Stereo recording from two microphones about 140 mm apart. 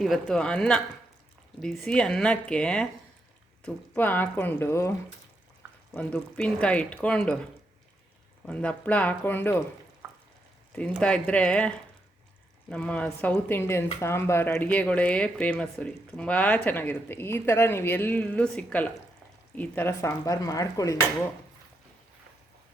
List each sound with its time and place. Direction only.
0.0 s speech: 5° left (ahead or behind)
5.9 s speech: 10° left (ahead or behind)
8.4 s speech: 10° left (ahead or behind)
10.8 s speech: 10° left (ahead or behind)
12.7 s speech: 10° left (ahead or behind); by 21.0 s 25° left (ahead or behind)